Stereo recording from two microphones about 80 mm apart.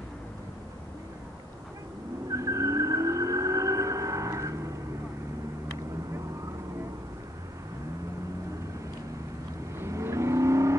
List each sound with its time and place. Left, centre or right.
2.3 s vehicle: right
9.8 s vehicle: right